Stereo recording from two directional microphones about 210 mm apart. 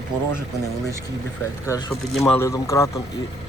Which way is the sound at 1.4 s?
15° left (ahead or behind).